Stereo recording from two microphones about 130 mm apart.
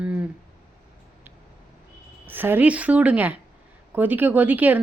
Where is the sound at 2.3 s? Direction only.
15° right (ahead or behind).